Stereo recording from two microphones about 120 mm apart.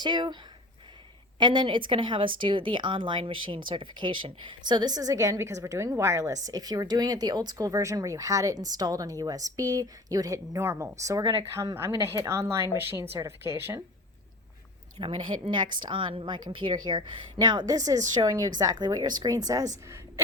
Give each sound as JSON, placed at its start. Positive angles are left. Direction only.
{"t": 0.0, "sound": "speech", "side_deg": -40}
{"t": 1.4, "sound": "a woman's voice", "side_deg": -40}
{"t": 14.9, "sound": "speech", "side_deg": -45}